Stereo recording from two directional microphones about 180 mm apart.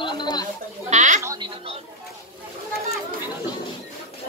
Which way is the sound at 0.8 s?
40° right (ahead or behind).